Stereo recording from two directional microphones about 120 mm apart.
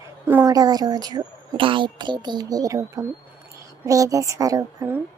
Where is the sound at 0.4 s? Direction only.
30° right (ahead or behind).